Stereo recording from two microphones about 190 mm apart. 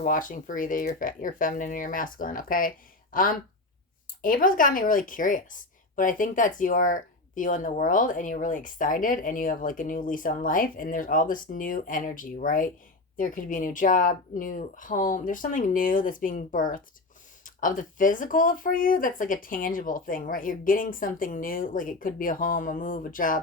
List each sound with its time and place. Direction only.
0.0 s a woman's voice: 45° left (ahead or behind)